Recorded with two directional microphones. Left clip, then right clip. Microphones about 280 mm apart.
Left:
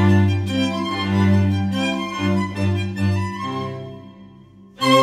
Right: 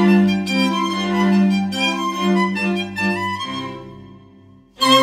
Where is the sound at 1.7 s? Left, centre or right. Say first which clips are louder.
Right 3 dB; centre.